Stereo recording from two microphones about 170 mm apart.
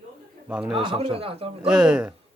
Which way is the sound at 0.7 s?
30° right (ahead or behind).